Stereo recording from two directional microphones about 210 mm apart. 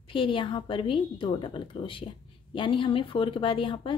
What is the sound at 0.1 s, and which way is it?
Speech, 25° left (ahead or behind).